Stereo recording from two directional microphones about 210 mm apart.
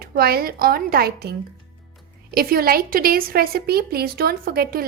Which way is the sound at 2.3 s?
45° right (ahead or behind).